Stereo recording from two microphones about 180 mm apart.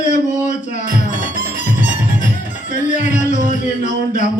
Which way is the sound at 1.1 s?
45° right (ahead or behind).